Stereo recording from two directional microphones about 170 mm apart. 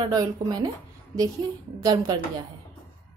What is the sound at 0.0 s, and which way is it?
Speech, 25° right (ahead or behind).